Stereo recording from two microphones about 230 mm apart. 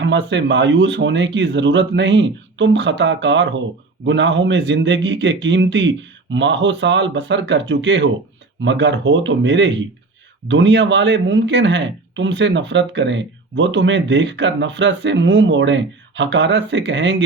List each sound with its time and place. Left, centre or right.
0.0 s a man's voice: right